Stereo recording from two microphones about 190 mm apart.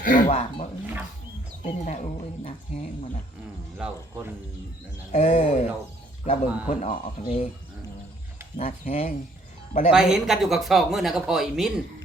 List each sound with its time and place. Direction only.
0.0 s a sound: 45° left (ahead or behind)
0.3 s speech: 30° left (ahead or behind)
3.8 s speech: 5° right (ahead or behind)
5.1 s speech: 35° left (ahead or behind)
8.5 s speech: 35° left (ahead or behind)
9.9 s speech: 5° right (ahead or behind)